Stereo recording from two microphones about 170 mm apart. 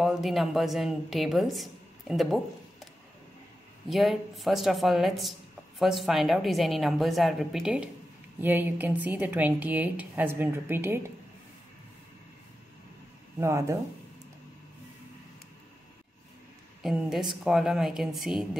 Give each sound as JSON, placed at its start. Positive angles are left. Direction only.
{"t": 0.0, "sound": "a woman's voice", "side_deg": 0}
{"t": 3.9, "sound": "a woman's voice", "side_deg": 0}
{"t": 13.4, "sound": "a woman's voice", "side_deg": -15}
{"t": 16.8, "sound": "a woman's voice", "side_deg": 0}